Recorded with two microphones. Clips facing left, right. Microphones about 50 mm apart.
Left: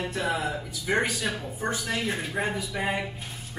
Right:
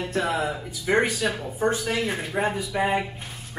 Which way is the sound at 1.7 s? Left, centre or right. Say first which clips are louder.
Right 4 dB; right.